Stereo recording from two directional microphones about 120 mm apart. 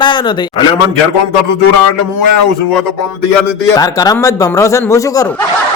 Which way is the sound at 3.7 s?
30° left (ahead or behind).